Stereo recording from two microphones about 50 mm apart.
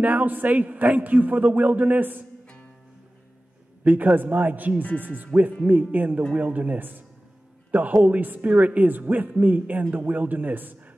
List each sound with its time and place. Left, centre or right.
0.0 s a man's voice: right
3.8 s a man's voice: right